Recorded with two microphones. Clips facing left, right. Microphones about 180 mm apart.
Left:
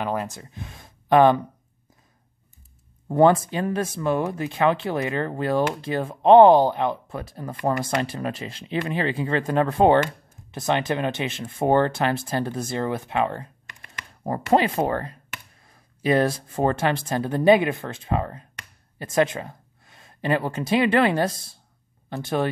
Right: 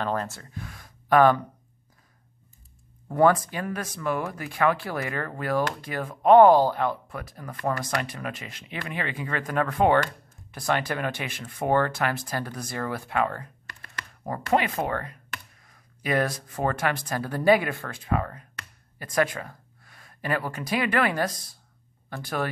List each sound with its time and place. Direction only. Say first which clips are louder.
0.0 s speech: left 1 dB; 15° left (ahead or behind)
3.1 s speech: left 3 dB; 25° left (ahead or behind)
14.2 s speech: left 4 dB; 30° left (ahead or behind)